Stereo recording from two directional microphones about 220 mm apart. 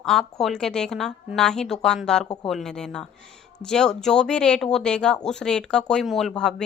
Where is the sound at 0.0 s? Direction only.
Centre (ahead or behind).